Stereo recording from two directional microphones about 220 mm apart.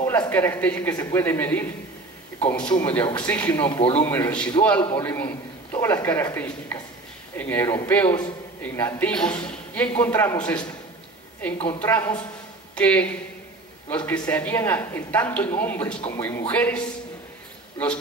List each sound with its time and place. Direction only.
0.0 s a man's voice: 10° left (ahead or behind)
3.6 s speech: 25° left (ahead or behind)
4.0 s speech: 10° left (ahead or behind)
11.8 s speech: 10° left (ahead or behind)